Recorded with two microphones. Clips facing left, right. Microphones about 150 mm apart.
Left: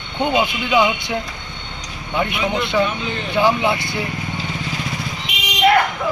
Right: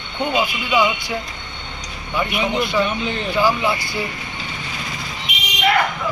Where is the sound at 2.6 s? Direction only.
25° left (ahead or behind).